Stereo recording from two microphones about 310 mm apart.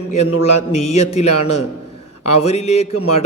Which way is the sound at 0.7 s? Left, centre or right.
Left.